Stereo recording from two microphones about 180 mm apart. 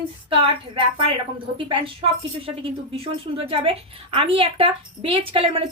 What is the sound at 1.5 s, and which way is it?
Speech, 25° right (ahead or behind).